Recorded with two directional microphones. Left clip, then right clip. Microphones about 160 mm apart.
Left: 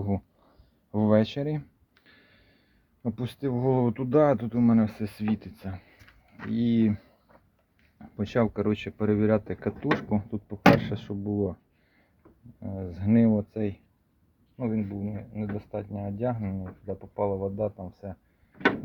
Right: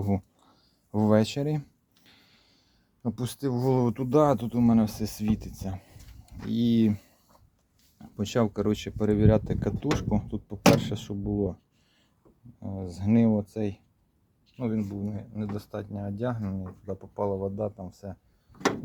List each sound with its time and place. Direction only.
0.0 s a sound: 25° right (ahead or behind)
3.0 s speech: 10° right (ahead or behind); by 6.0 s 30° right (ahead or behind)
6.5 s speech: 20° right (ahead or behind)
12.5 s speech: 10° right (ahead or behind)